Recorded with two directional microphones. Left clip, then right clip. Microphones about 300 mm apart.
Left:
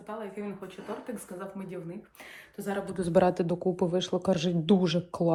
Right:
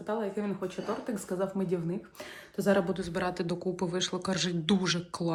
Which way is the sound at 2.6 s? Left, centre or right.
Right.